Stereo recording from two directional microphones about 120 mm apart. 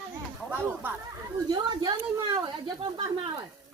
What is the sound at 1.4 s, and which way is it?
Speech, 35° right (ahead or behind).